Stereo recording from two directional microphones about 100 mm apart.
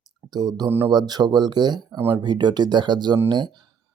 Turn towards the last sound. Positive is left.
turn(degrees=-50)  # may be behind; listen again after turning